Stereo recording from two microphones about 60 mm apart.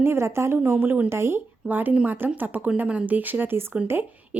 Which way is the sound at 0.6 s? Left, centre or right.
Right.